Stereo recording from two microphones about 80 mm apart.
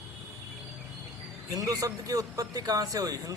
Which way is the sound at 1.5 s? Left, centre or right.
Right.